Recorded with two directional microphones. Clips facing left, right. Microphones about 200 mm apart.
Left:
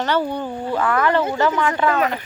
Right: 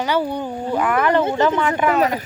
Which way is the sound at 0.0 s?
10° right (ahead or behind).